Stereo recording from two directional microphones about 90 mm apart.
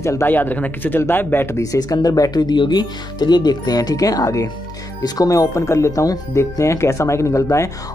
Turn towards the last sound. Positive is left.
turn(degrees=35)  # may be behind; listen again after turning